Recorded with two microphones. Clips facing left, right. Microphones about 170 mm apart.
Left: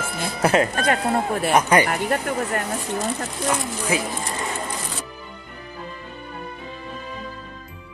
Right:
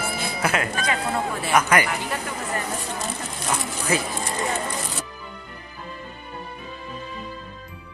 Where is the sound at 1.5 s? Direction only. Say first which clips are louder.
Left 2 dB; 30° left (ahead or behind).